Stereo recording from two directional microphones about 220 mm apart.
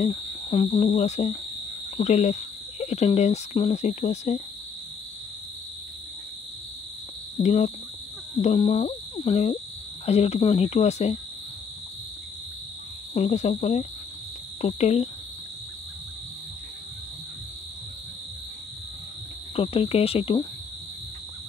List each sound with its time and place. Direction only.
0.0 s cricket: 25° left (ahead or behind)
2.0 s speech: 30° left (ahead or behind)
7.3 s speech: 30° left (ahead or behind)
10.0 s cricket: 30° left (ahead or behind)
13.1 s speech: 30° left (ahead or behind)
14.6 s cricket: 30° left (ahead or behind)
19.5 s cricket: 25° left (ahead or behind)